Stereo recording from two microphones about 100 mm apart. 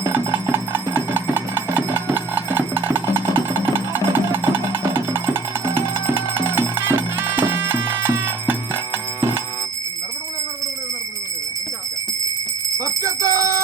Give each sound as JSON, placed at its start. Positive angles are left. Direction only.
{"t": 0.1, "sound": "music", "side_deg": -20}
{"t": 12.8, "sound": "music", "side_deg": -35}